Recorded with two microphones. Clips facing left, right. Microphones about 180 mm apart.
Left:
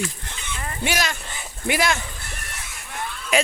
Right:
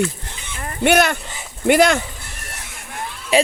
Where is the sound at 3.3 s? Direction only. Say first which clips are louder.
Right 5 dB; 30° right (ahead or behind).